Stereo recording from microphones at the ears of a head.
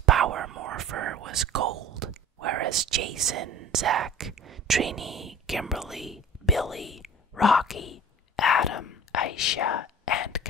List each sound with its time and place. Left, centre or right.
0.0 s whispering: right
5.7 s speech: centre
7.7 s whispering: left